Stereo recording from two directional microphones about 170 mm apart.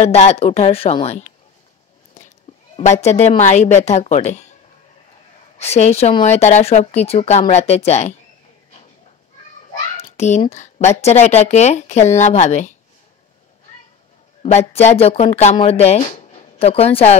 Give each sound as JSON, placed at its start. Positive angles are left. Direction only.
{"t": 0.0, "sound": "speech", "side_deg": 40}
{"t": 2.7, "sound": "a woman's voice", "side_deg": 40}
{"t": 5.6, "sound": "speech", "side_deg": 40}
{"t": 10.1, "sound": "a woman's voice", "side_deg": 40}
{"t": 14.4, "sound": "speech", "side_deg": 40}